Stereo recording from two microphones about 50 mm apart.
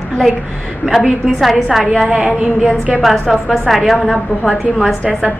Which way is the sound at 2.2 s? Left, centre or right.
Centre.